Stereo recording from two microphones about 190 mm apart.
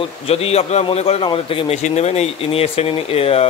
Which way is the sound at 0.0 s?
30° left (ahead or behind).